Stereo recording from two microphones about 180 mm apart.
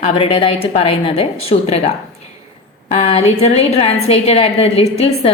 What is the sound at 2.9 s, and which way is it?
A woman's voice, 40° left (ahead or behind).